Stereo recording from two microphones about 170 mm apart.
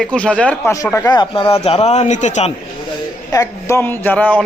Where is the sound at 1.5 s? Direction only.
35° left (ahead or behind).